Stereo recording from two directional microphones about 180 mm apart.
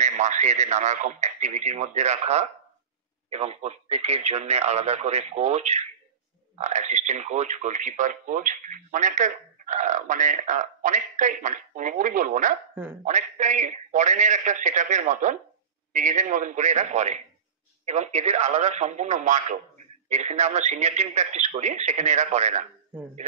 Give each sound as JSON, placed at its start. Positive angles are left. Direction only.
{"t": 0.0, "sound": "a man's voice", "side_deg": -45}